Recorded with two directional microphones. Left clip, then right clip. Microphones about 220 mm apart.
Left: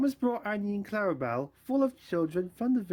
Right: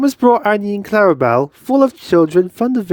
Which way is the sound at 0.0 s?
45° right (ahead or behind).